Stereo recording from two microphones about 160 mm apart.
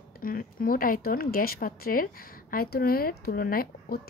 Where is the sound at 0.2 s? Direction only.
65° left (ahead or behind).